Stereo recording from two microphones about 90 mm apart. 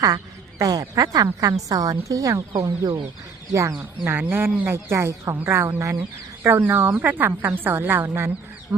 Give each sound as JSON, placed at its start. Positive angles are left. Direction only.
{"t": 0.6, "sound": "speech", "side_deg": -45}
{"t": 3.8, "sound": "speech", "side_deg": -20}
{"t": 6.0, "sound": "speech", "side_deg": -25}